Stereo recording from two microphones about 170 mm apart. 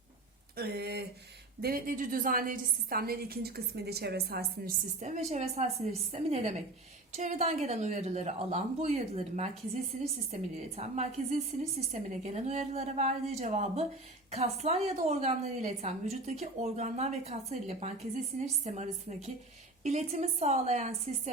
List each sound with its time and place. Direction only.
0.5 s speech: 70° right (ahead or behind)
1.6 s a woman's voice: 60° right (ahead or behind)
4.9 s a woman's voice: 45° right (ahead or behind)